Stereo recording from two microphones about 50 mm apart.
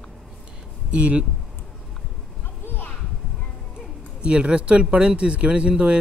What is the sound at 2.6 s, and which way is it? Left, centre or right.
Children playing, left.